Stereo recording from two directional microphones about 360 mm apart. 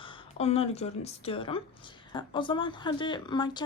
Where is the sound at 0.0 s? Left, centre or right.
Centre.